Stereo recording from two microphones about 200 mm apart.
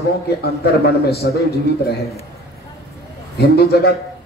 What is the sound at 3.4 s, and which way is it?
Speech, 50° left (ahead or behind).